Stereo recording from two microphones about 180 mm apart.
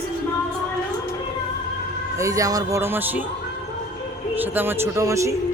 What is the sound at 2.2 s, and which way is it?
Speech, 20° right (ahead or behind).